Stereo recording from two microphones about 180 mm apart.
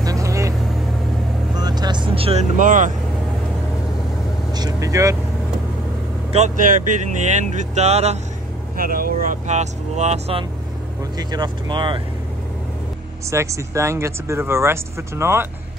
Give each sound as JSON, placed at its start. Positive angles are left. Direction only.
{"t": 0.0, "sound": "vehicle", "side_deg": -20}
{"t": 2.5, "sound": "speech", "side_deg": -45}
{"t": 4.6, "sound": "vehicle", "side_deg": -20}
{"t": 6.3, "sound": "speech", "side_deg": -45}
{"t": 8.7, "sound": "speech", "side_deg": -50}
{"t": 11.1, "sound": "speech", "side_deg": -25}
{"t": 13.3, "sound": "speech", "side_deg": -15}